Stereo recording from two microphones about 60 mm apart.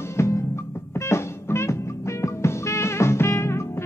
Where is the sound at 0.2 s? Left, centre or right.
Left.